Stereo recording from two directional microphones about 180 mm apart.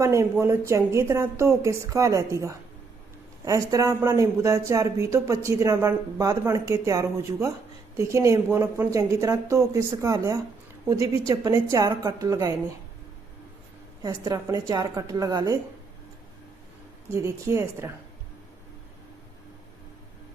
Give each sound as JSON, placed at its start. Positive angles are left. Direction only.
{"t": 0.0, "sound": "a woman's voice", "side_deg": -15}
{"t": 14.0, "sound": "a woman's voice", "side_deg": -20}
{"t": 17.1, "sound": "a woman's voice", "side_deg": -15}